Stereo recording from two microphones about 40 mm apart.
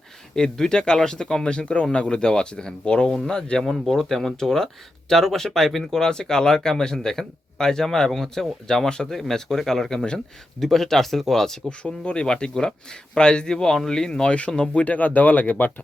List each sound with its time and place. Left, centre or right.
0.3 s speech: centre
3.6 s speech: centre
3.8 s speech: centre
11.8 s speech: left
14.3 s speech: left
14.8 s speech: left